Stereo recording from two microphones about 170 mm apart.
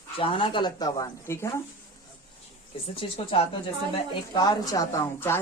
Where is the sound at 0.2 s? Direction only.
30° left (ahead or behind).